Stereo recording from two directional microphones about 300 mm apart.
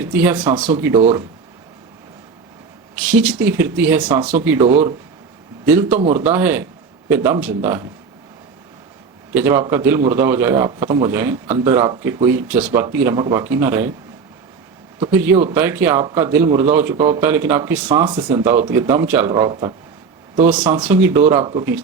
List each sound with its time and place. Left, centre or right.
0.0 s a man's voice: centre
2.9 s a man's voice: centre
5.9 s speech: right
6.1 s a man's voice: centre
9.3 s a man's voice: centre
15.0 s a man's voice: centre